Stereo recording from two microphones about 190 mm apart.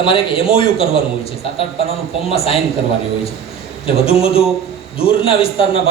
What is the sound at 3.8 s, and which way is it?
A man's voice, 30° left (ahead or behind).